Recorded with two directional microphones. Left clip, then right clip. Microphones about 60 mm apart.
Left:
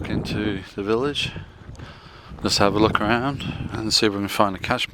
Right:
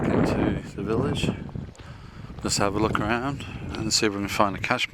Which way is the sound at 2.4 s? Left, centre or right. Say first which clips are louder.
Left 6 dB; left.